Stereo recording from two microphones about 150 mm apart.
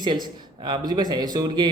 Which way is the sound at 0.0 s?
30° right (ahead or behind).